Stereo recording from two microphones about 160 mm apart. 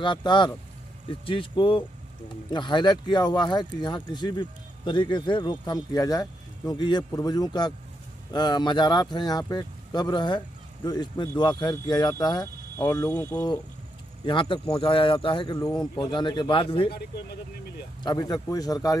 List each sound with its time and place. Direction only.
0.0 s speech: 30° left (ahead or behind); by 13.4 s 10° left (ahead or behind)
14.2 s speech: 30° left (ahead or behind)
18.0 s speech: 25° left (ahead or behind)